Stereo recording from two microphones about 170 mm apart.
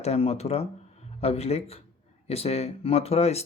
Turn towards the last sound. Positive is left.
turn(degrees=40)  # may be behind; listen again after turning